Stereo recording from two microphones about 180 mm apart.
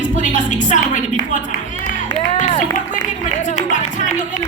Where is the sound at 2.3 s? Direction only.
40° left (ahead or behind).